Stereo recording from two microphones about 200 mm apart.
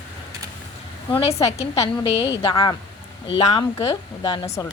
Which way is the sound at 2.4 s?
20° left (ahead or behind).